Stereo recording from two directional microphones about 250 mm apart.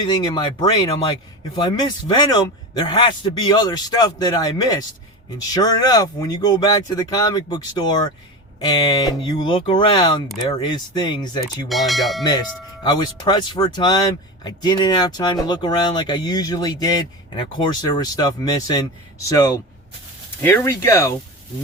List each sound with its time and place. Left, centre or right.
0.0 s speech: centre
11.7 s speech: centre
12.3 s speech: centre